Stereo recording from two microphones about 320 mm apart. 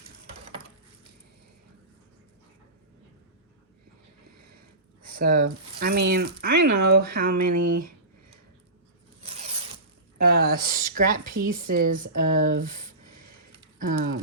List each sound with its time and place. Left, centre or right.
5.1 s speech: right
6.5 s speech: right
6.7 s speech: right
9.2 s zipper: centre
10.2 s speech: right